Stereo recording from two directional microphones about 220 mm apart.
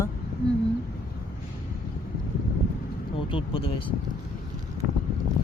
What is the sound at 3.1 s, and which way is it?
Speech, 25° left (ahead or behind).